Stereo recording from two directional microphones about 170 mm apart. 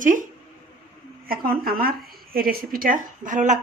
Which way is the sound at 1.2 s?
60° right (ahead or behind).